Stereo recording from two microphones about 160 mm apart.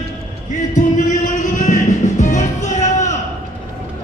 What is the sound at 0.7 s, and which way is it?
Music, 50° left (ahead or behind).